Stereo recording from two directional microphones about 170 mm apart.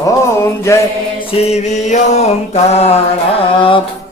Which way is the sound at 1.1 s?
35° left (ahead or behind).